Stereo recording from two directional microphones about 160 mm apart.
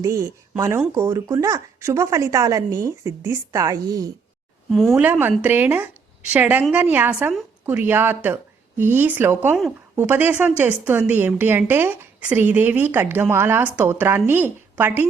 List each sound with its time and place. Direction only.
0.0 s speech: 20° right (ahead or behind)
4.7 s a woman's voice: 5° left (ahead or behind)
4.9 s a woman's voice: 10° right (ahead or behind)